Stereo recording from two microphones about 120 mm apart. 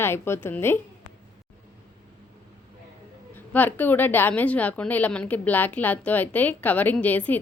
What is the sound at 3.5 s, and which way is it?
A woman's voice, 15° left (ahead or behind).